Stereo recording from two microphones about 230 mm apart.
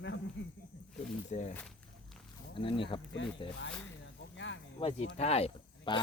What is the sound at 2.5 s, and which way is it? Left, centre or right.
Speech, left.